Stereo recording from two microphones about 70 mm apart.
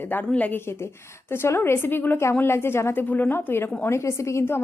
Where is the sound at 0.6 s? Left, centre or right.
Left.